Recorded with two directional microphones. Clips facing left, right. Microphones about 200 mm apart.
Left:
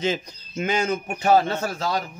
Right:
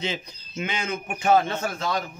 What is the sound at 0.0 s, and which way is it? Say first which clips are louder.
A man's voice: left 6 dB; 45° left (ahead or behind).